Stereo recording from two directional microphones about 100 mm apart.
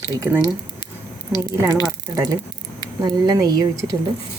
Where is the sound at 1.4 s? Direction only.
30° right (ahead or behind).